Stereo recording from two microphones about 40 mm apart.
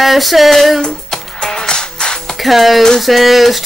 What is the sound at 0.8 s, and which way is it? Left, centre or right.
Music, centre.